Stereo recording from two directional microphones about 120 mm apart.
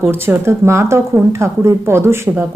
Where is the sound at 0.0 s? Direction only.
20° right (ahead or behind).